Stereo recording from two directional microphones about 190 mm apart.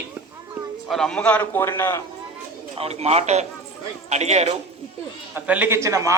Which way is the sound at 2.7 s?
30° right (ahead or behind).